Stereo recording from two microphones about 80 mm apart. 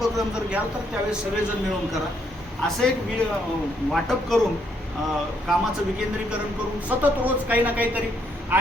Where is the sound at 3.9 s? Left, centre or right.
Centre.